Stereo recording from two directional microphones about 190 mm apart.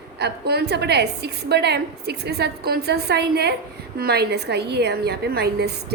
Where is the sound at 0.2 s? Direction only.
60° right (ahead or behind).